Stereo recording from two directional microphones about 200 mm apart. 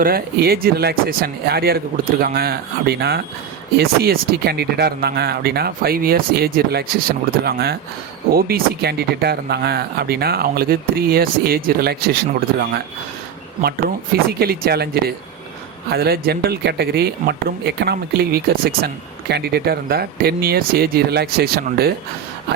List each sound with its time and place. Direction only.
0.0 s speech: 50° right (ahead or behind)